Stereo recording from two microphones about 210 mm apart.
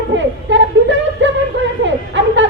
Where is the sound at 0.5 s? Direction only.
60° right (ahead or behind).